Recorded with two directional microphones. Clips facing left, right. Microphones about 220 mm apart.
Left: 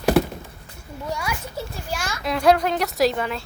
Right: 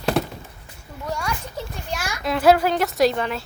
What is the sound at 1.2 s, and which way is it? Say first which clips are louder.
Speech: even; 5° left (ahead or behind).